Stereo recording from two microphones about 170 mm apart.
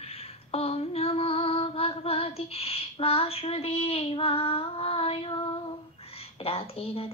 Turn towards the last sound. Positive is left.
turn(degrees=35)  # may be behind; listen again after turning